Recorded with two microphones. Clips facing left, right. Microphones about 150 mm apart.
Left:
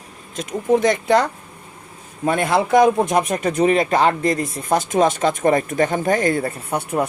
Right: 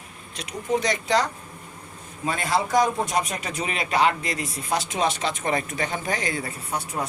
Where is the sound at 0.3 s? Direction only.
50° left (ahead or behind).